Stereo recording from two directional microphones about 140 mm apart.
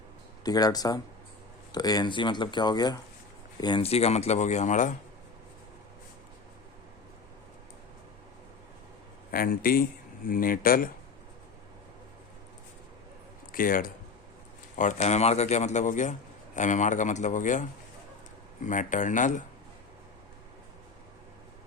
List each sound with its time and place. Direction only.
0.4 s speech: 30° left (ahead or behind)
3.8 s speech: 50° left (ahead or behind)
9.3 s speech: 90° left
13.5 s speech: 85° left
14.8 s speech: 60° left (ahead or behind)